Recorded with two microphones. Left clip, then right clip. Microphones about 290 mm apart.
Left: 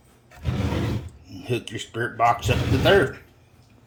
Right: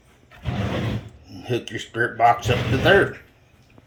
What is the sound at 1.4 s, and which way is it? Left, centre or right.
Speech, left.